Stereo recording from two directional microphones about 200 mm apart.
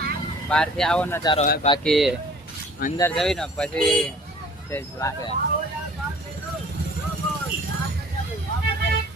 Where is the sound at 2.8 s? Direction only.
45° left (ahead or behind).